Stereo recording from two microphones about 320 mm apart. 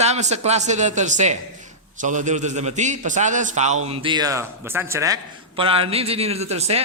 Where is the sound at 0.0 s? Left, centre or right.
Right.